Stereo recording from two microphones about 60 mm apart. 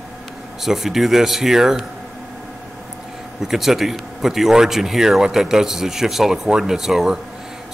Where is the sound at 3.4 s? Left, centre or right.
Centre.